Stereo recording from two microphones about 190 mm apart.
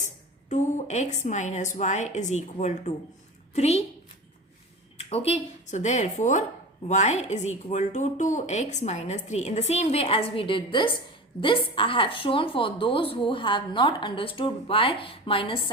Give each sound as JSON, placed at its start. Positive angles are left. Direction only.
{"t": 0.5, "sound": "speech", "side_deg": 35}
{"t": 4.9, "sound": "a woman's voice", "side_deg": 30}